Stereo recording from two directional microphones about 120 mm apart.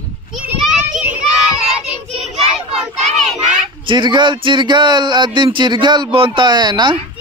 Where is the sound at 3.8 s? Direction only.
40° right (ahead or behind).